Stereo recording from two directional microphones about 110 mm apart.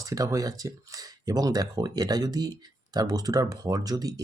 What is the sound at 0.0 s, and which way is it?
Speech, 30° right (ahead or behind).